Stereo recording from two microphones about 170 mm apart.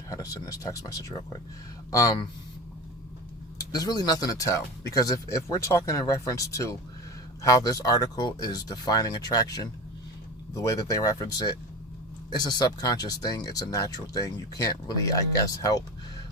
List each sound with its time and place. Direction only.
0.1 s speech: 20° left (ahead or behind)
3.6 s speech: 20° left (ahead or behind)